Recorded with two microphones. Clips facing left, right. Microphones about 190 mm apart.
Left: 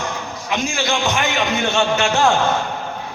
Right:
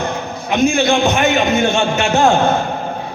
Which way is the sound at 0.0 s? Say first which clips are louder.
Right 5 dB; 60° right (ahead or behind).